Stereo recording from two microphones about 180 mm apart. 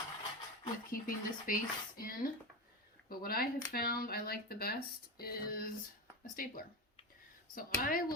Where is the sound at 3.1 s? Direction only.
55° left (ahead or behind).